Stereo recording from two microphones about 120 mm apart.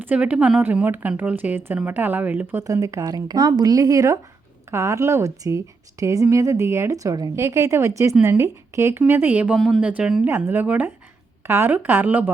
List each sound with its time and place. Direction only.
0.0 s speech: 15° right (ahead or behind)
2.6 s a woman's voice: 25° right (ahead or behind)
9.6 s speech: centre (ahead or behind)